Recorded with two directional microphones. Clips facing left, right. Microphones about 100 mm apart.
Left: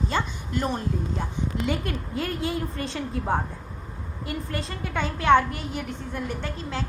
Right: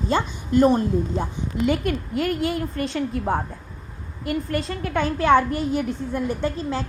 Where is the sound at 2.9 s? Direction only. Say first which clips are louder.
Right 2 dB; centre (ahead or behind).